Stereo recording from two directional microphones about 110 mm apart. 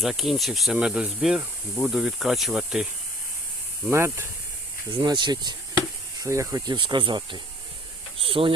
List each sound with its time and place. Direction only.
0.0 s speech: centre (ahead or behind)
3.8 s speech: 20° right (ahead or behind)
5.0 s speech: 40° right (ahead or behind)
6.2 s speech: 30° right (ahead or behind)
6.7 s speech: 45° right (ahead or behind)